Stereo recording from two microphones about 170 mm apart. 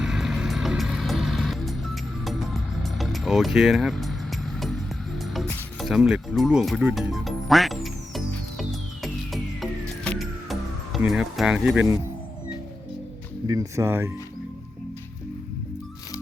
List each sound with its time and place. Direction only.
0.0 s music: centre (ahead or behind)
13.5 s speech: 20° right (ahead or behind)